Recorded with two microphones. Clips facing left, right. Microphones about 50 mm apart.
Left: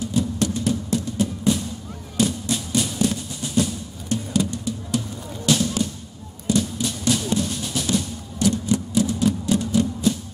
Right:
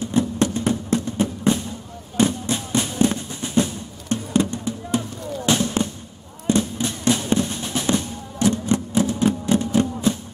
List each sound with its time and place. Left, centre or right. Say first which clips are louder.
0.0 s music: right 3 dB; right